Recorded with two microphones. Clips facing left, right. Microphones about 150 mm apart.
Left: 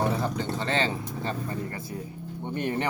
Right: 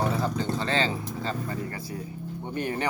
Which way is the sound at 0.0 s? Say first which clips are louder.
Even; 20° left (ahead or behind).